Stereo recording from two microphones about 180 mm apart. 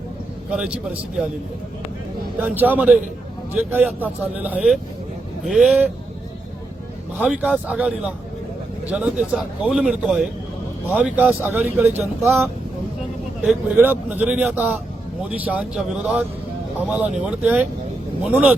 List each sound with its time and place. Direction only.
0.5 s speech: 5° right (ahead or behind)
2.4 s speech: 10° right (ahead or behind)
7.2 s speech: 5° right (ahead or behind)
13.7 s speech: 10° right (ahead or behind)